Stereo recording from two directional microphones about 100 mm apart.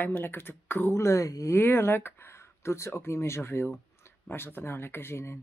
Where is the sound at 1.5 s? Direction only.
25° left (ahead or behind).